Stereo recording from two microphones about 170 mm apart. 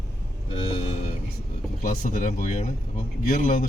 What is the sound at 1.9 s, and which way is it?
Speech, 50° left (ahead or behind).